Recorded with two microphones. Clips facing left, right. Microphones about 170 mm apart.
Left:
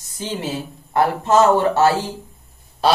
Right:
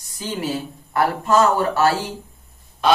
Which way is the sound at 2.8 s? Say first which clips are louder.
Even; 35° left (ahead or behind).